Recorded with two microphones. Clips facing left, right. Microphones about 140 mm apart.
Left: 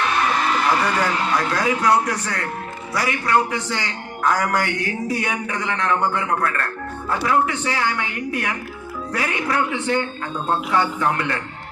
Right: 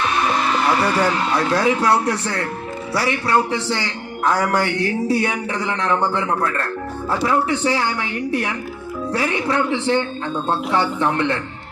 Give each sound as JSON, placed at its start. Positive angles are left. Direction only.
{"t": 0.8, "sound": "a man's voice", "side_deg": -30}